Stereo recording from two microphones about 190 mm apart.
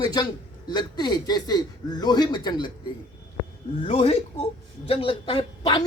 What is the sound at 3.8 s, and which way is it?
A woman's voice, 30° left (ahead or behind).